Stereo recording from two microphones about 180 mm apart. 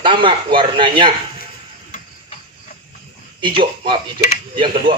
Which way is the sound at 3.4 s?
25° right (ahead or behind).